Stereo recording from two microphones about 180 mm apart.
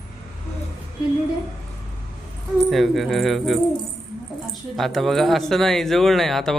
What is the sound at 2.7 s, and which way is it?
Speech, centre (ahead or behind).